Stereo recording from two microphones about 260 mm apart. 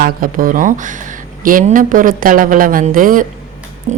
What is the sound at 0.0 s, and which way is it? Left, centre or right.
A woman's voice, right.